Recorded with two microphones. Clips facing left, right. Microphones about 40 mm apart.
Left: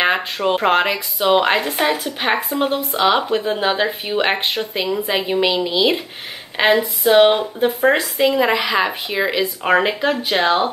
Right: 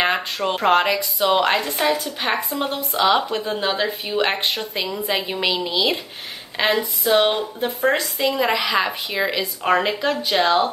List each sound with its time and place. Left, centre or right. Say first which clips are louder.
0.0 s speech: left 3 dB; centre
2.7 s speech: even; centre
6.5 s speech: left 5 dB; centre